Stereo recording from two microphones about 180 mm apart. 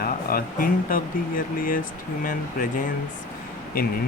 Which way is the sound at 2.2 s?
50° left (ahead or behind).